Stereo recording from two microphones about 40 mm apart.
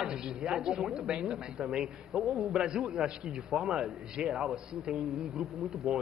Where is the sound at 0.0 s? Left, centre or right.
Centre.